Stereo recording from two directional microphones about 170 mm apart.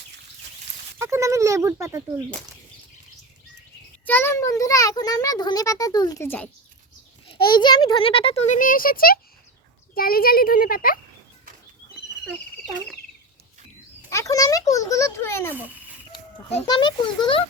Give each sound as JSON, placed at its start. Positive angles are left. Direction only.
{"t": 0.9, "sound": "speech", "side_deg": -15}
{"t": 4.0, "sound": "a child's voice", "side_deg": 10}
{"t": 7.3, "sound": "a child's voice", "side_deg": 25}
{"t": 8.5, "sound": "a child's voice", "side_deg": 55}
{"t": 14.1, "sound": "a child's voice", "side_deg": 20}
{"t": 15.5, "sound": "a sound", "side_deg": -10}
{"t": 16.6, "sound": "a child's voice", "side_deg": 25}